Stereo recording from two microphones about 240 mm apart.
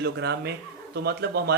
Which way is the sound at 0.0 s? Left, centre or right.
Right.